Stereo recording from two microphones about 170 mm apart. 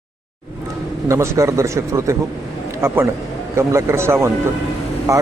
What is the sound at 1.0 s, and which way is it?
Speech, 20° right (ahead or behind).